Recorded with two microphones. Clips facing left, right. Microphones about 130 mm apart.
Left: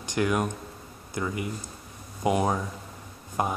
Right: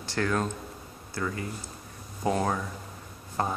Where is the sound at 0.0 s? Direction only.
15° left (ahead or behind).